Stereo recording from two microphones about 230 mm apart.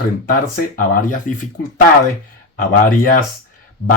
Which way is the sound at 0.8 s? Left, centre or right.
Left.